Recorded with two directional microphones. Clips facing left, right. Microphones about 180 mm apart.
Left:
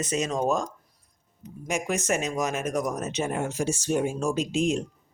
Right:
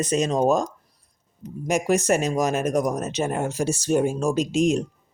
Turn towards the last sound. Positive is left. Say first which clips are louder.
# right 4 dB
turn(degrees=-40)  # may be behind; listen again after turning